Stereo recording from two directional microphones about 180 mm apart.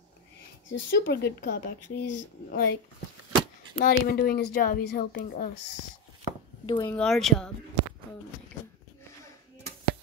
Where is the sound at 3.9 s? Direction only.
55° left (ahead or behind).